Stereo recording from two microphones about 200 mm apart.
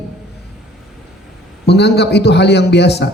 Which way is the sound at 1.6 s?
55° left (ahead or behind).